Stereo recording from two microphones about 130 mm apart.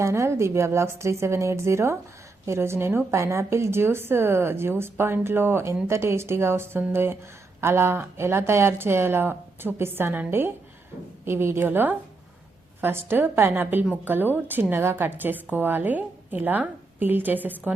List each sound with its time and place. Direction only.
0.0 s a woman's voice: 20° right (ahead or behind)